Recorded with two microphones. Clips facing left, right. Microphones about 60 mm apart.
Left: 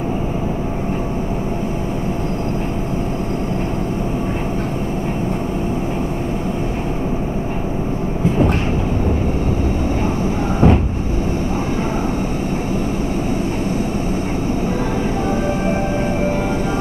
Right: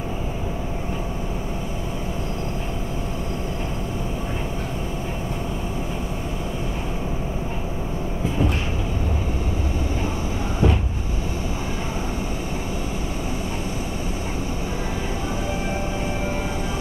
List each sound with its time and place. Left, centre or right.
10.6 s vehicle: left